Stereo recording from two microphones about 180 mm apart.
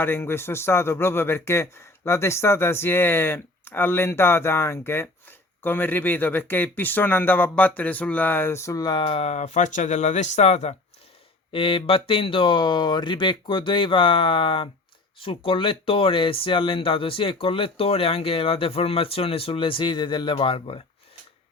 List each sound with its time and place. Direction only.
0.0 s speech: 10° left (ahead or behind); by 20.8 s 30° left (ahead or behind)